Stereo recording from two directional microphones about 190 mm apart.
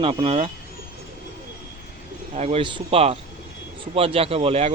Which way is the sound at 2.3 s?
35° right (ahead or behind).